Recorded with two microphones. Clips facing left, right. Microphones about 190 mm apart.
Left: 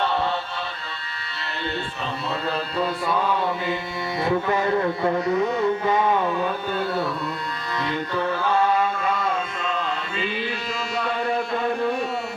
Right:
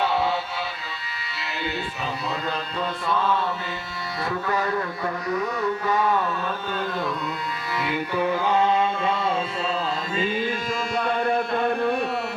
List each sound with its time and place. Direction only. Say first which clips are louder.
2.7 s music: left 2 dB; 10° left (ahead or behind)
7.8 s music: right 1 dB; 10° right (ahead or behind); by 10.4 s 40° right (ahead or behind)
10.9 s a sound: right 1 dB; 55° right (ahead or behind)